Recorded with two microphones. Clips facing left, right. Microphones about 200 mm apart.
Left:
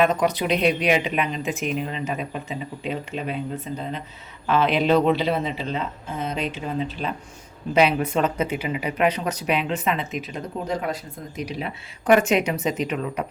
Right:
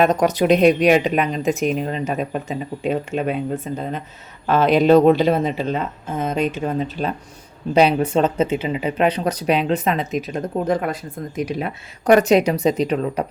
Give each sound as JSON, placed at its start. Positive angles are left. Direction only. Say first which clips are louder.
{"t": 0.0, "sound": "speech", "louder": "right 4 dB", "side_deg": -45}
{"t": 7.7, "sound": "speech", "louder": "right 4 dB", "side_deg": -35}